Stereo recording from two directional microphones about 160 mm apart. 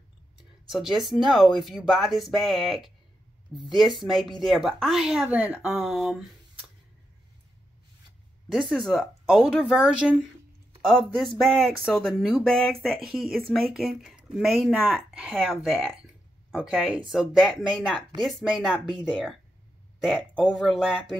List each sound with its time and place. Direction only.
0.7 s speech: centre (ahead or behind)
8.5 s speech: centre (ahead or behind)